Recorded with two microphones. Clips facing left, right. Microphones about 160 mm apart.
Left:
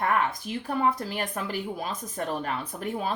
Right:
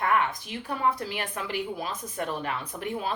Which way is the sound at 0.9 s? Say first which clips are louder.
Left 2 dB; 40° left (ahead or behind).